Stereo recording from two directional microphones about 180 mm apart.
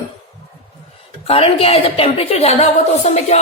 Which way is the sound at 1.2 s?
35° left (ahead or behind).